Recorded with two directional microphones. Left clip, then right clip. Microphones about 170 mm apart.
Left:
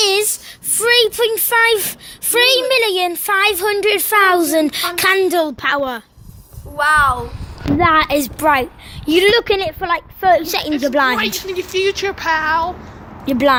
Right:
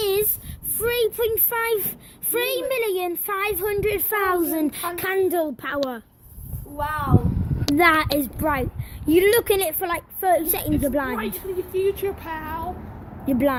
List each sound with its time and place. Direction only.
0.0 s a sound: 5° left (ahead or behind)
0.8 s a woman's voice: 10° left (ahead or behind)
6.7 s speech: 30° left (ahead or behind)
7.8 s a woman's voice: 5° right (ahead or behind)
9.2 s a woman's voice: 5° right (ahead or behind)
11.7 s speech: 20° left (ahead or behind)
13.2 s a woman's voice: centre (ahead or behind)